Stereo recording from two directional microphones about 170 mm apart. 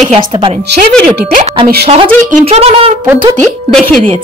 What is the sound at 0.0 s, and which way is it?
Speech, 45° right (ahead or behind).